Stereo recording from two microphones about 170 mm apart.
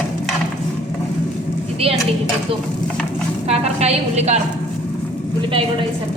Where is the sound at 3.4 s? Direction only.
40° right (ahead or behind).